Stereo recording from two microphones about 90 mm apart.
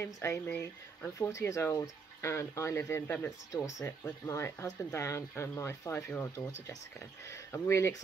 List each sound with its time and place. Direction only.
0.0 s speech: 30° left (ahead or behind)